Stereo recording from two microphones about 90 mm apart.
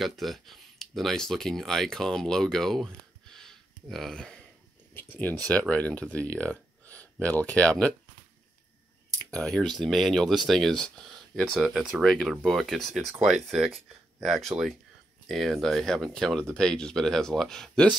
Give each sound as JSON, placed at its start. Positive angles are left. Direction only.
{"t": 0.0, "sound": "speech", "side_deg": 0}
{"t": 5.1, "sound": "speech", "side_deg": 20}
{"t": 9.2, "sound": "speech", "side_deg": 10}